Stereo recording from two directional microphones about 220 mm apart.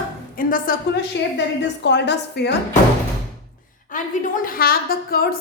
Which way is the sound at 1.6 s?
55° left (ahead or behind).